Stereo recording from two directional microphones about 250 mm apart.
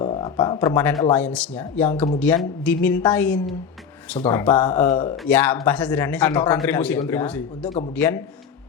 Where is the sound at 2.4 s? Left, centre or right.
Centre.